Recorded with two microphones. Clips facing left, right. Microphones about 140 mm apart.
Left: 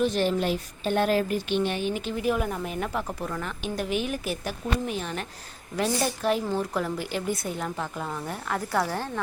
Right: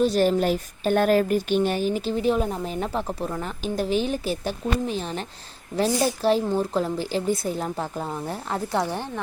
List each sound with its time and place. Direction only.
0.0 s speech: 40° right (ahead or behind); by 9.0 s 20° right (ahead or behind)